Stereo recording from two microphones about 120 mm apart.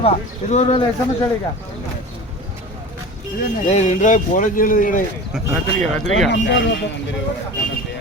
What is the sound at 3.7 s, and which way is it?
Speech, 70° left (ahead or behind).